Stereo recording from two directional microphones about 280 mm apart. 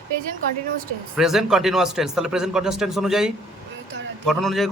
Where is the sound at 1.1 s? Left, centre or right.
Centre.